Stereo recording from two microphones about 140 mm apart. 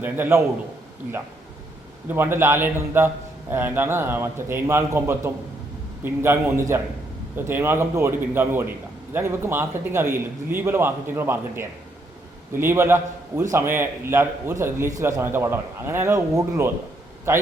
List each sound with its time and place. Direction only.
0.0 s a man's voice: 15° right (ahead or behind)
2.0 s a man's voice: 15° right (ahead or behind)